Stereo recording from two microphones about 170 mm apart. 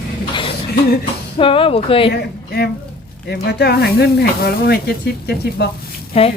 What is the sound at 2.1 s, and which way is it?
A woman's voice, 70° left (ahead or behind).